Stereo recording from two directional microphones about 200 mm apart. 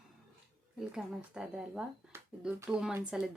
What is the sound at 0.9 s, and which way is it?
A woman's voice, 5° right (ahead or behind).